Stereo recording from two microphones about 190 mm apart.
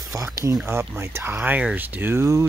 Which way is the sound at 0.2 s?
15° right (ahead or behind).